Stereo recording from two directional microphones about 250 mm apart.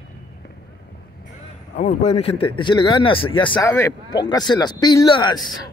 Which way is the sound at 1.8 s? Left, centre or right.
Left.